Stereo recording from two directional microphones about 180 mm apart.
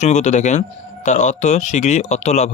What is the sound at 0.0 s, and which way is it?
Speech, 40° left (ahead or behind).